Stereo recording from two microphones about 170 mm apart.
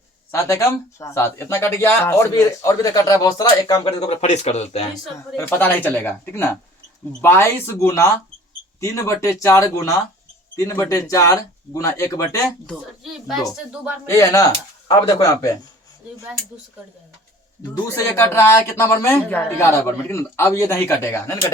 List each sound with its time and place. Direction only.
0.3 s speech: 20° left (ahead or behind)
3.8 s speech: 40° left (ahead or behind)
5.1 s speech: 15° left (ahead or behind)
12.6 s speech: centre (ahead or behind)
14.1 s speech: 20° left (ahead or behind)
17.8 s speech: 15° left (ahead or behind)